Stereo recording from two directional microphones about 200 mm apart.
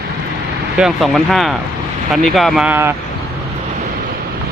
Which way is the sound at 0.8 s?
Centre (ahead or behind).